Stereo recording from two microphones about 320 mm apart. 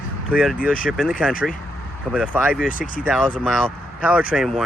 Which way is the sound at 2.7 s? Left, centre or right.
Left.